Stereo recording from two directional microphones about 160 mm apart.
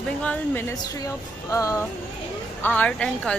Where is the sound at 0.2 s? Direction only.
10° left (ahead or behind).